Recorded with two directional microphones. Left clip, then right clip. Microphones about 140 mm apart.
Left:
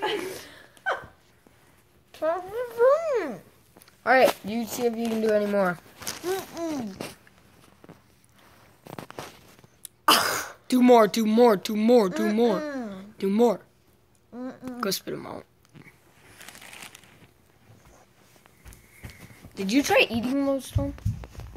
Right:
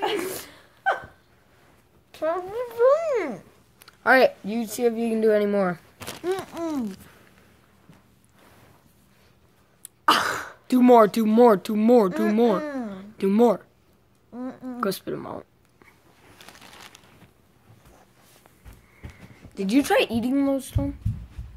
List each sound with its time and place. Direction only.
0.0 s a sound: 25° right (ahead or behind)
0.8 s dog: 10° right (ahead or behind)
2.1 s a sound: 15° right (ahead or behind)
4.0 s speech: 25° right (ahead or behind)
4.5 s speech: centre (ahead or behind)
5.3 s speech: 10° right (ahead or behind)
10.0 s throat clearing: 55° left (ahead or behind)
10.7 s speech: 5° right (ahead or behind)
19.0 s a sound: 60° left (ahead or behind)
19.5 s speech: 15° right (ahead or behind)